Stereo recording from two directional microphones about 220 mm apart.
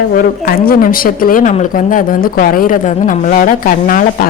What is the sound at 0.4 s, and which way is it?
Speech, 40° left (ahead or behind).